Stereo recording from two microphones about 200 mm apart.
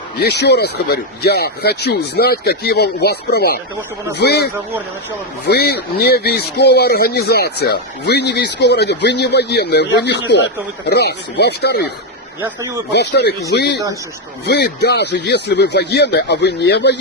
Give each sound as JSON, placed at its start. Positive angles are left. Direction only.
{"t": 0.2, "sound": "speech", "side_deg": 55}
{"t": 12.4, "sound": "a man's voice", "side_deg": -15}
{"t": 12.9, "sound": "speech", "side_deg": 55}